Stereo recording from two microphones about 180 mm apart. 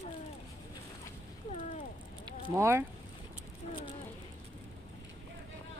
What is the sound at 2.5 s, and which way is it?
Speech, 15° right (ahead or behind).